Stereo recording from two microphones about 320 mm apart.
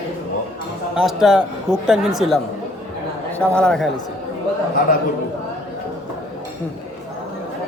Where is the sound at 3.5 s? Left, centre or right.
Centre.